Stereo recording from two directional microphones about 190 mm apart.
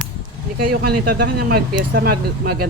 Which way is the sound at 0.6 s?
50° right (ahead or behind).